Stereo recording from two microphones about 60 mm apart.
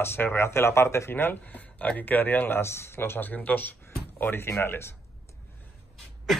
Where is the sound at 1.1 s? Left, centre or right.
Left.